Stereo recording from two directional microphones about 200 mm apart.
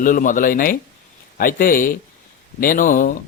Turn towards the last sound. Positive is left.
turn(degrees=40)  # may be behind; listen again after turning